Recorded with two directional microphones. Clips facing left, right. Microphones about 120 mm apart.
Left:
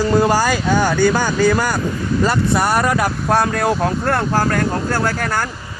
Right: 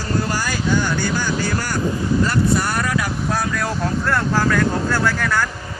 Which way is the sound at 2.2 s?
80° left.